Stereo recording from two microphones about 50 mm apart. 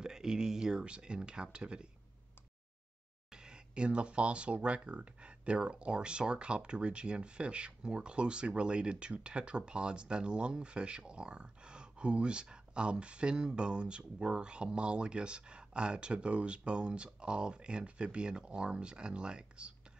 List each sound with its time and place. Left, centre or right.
0.0 s speech: centre
3.3 s speech: centre